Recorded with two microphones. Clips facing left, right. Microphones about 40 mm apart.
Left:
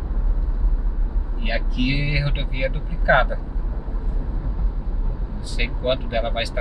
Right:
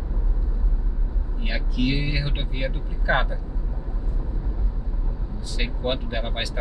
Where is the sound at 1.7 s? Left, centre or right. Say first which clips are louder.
Even; centre.